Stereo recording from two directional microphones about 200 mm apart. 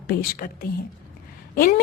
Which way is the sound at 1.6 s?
45° left (ahead or behind).